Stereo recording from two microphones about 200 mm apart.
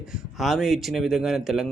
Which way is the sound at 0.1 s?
Centre (ahead or behind).